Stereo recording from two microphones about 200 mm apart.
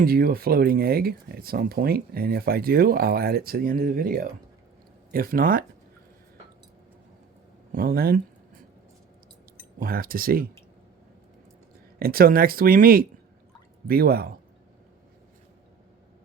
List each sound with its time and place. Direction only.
0.0 s speech: 45° right (ahead or behind)
7.7 s speech: 45° right (ahead or behind)
9.7 s speech: 45° right (ahead or behind)
11.9 s speech: 50° right (ahead or behind)